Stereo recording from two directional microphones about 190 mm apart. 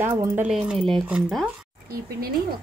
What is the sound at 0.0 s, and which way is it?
Speech, 10° right (ahead or behind).